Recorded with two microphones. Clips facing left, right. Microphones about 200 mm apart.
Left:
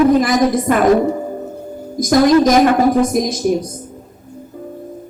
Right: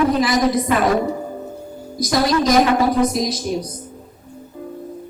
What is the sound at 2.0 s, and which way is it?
A woman's voice, 50° left (ahead or behind).